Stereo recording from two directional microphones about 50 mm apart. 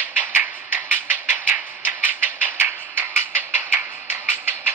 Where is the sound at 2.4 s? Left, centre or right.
Right.